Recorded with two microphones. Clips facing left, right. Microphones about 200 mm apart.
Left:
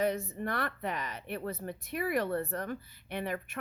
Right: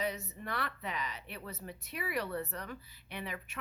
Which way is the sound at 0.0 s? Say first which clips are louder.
Left 7 dB; 50° left (ahead or behind).